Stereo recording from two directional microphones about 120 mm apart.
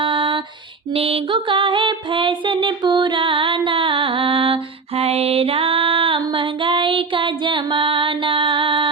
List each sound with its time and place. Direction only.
0.0 s a sound: 45° right (ahead or behind)
0.9 s music: 55° right (ahead or behind)
4.9 s female singing: 60° right (ahead or behind)